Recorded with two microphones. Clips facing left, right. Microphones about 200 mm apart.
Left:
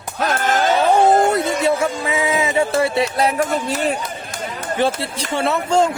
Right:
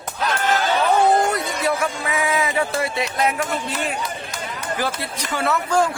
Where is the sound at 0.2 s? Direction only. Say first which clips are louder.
Left 2 dB; 50° left (ahead or behind).